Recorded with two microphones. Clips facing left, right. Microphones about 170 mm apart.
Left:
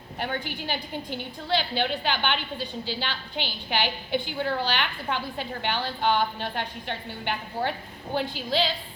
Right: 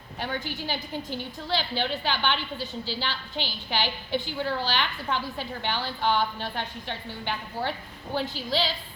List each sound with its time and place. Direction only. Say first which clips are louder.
0.2 s a woman's voice: left 1 dB; 55° left (ahead or behind)